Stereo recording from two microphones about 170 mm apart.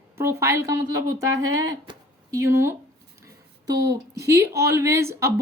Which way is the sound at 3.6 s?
75° right (ahead or behind).